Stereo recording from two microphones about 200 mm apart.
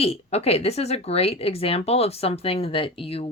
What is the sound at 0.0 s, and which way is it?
Speech, 30° left (ahead or behind).